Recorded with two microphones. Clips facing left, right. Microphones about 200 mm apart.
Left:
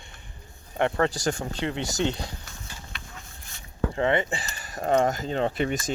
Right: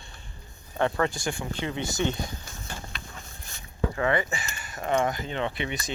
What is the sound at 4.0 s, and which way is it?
Speech, 25° left (ahead or behind).